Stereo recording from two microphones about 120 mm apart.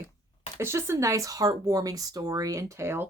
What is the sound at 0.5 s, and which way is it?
Speech, 20° right (ahead or behind).